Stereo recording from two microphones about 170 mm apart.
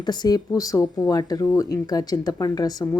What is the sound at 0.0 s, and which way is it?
Speech, 25° left (ahead or behind).